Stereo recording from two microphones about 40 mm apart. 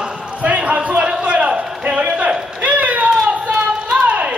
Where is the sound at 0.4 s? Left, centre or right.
Right.